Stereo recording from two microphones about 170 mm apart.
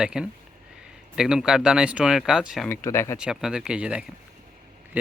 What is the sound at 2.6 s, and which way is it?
Speech, 15° left (ahead or behind).